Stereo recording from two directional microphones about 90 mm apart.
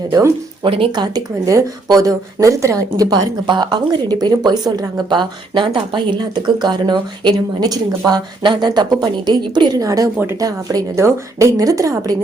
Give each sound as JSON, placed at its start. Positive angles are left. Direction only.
{"t": 0.1, "sound": "a woman's voice", "side_deg": -30}
{"t": 0.6, "sound": "speech", "side_deg": -75}
{"t": 1.0, "sound": "a woman's voice", "side_deg": -40}
{"t": 3.4, "sound": "a woman's voice", "side_deg": -55}